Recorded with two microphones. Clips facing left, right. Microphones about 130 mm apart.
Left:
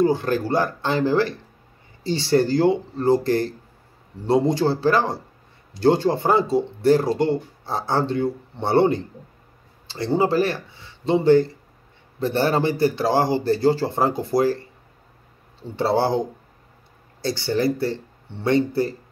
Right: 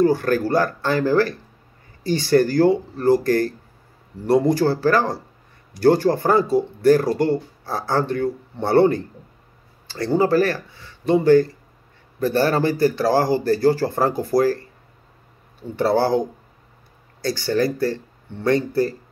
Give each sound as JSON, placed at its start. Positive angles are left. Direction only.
{"t": 0.0, "sound": "speech", "side_deg": 20}
{"t": 15.7, "sound": "speech", "side_deg": 25}